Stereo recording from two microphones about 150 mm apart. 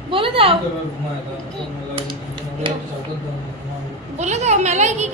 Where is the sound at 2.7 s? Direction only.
35° right (ahead or behind).